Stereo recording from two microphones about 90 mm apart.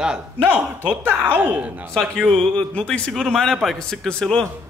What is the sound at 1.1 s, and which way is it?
Speech, 20° right (ahead or behind).